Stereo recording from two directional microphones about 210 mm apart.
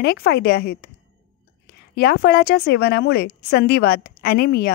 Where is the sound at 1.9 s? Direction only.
50° left (ahead or behind).